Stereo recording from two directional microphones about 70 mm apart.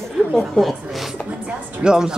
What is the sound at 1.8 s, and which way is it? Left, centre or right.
Speech, centre.